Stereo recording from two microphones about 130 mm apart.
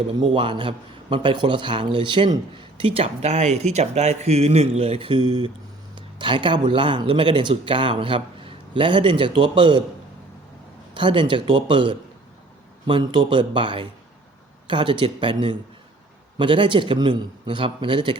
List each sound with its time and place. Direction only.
0.2 s a man's voice: 40° right (ahead or behind)
10.9 s a man's voice: 40° right (ahead or behind)